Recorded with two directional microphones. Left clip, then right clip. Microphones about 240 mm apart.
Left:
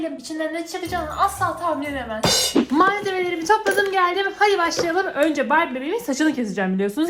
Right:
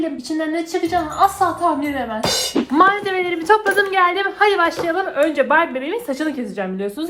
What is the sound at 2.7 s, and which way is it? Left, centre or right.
A woman's voice, centre.